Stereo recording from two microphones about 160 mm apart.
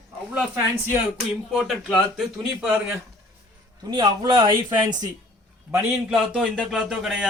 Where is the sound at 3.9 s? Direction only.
25° right (ahead or behind).